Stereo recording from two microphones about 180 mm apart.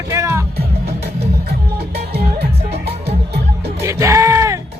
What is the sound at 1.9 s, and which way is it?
Music, 65° right (ahead or behind).